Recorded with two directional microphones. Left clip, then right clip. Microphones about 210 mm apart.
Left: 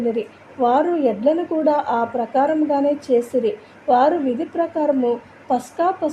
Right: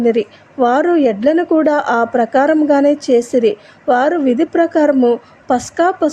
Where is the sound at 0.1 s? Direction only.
30° right (ahead or behind).